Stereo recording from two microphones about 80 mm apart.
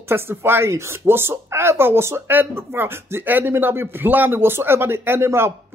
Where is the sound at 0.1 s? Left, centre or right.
Right.